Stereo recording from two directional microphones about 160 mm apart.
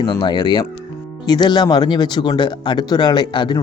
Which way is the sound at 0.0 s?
30° left (ahead or behind).